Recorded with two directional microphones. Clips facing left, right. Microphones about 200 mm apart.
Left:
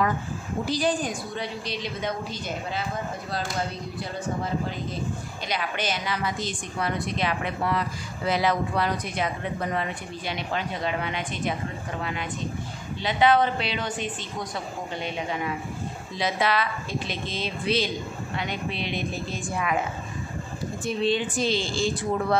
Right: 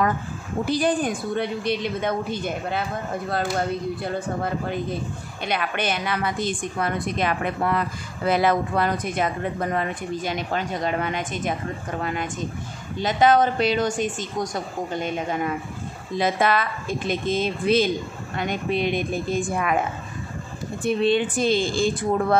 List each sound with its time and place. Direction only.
0.7 s a woman's voice: 55° right (ahead or behind)
4.0 s a woman's voice: 55° right (ahead or behind)
20.8 s a woman's voice: 60° right (ahead or behind)